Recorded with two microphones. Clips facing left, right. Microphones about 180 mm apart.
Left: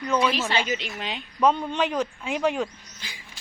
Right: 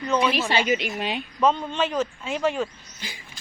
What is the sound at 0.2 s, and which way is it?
Speech, 10° right (ahead or behind).